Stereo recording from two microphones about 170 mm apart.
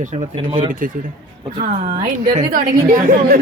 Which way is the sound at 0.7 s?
55° right (ahead or behind).